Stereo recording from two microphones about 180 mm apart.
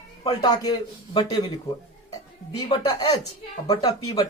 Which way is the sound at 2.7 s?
20° left (ahead or behind).